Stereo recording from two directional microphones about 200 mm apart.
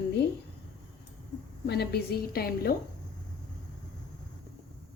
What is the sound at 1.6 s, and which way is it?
A woman's voice, 55° left (ahead or behind).